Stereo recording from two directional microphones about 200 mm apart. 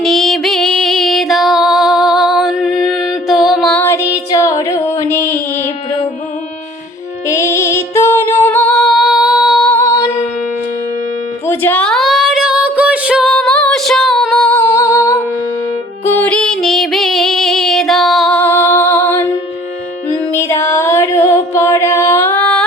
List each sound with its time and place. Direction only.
0.0 s music: centre (ahead or behind)
7.3 s music: 15° left (ahead or behind)
9.7 s music: 20° left (ahead or behind)
11.4 s a sound: 10° left (ahead or behind)
16.0 s music: 10° left (ahead or behind)
20.3 s music: 15° left (ahead or behind)